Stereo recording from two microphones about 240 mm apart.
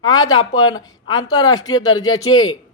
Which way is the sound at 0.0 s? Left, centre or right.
Centre.